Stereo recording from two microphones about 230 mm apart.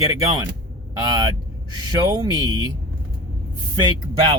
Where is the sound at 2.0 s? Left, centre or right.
Centre.